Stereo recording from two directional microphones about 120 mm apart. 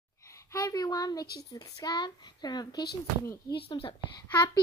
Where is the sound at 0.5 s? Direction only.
30° left (ahead or behind).